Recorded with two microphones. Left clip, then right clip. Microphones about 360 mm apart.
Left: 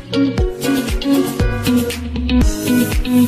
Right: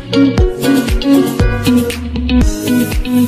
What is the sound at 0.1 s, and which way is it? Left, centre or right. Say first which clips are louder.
Music: right 6 dB; right.